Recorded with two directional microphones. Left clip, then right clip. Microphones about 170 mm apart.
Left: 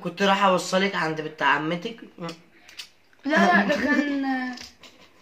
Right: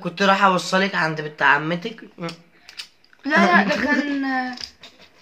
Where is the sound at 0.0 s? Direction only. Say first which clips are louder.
Right 4 dB; 15° right (ahead or behind).